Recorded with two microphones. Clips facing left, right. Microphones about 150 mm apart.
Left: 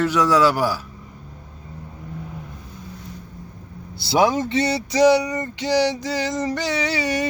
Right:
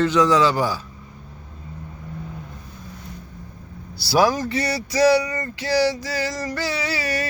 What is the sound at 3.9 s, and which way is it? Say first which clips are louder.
Speech: even; 20° left (ahead or behind).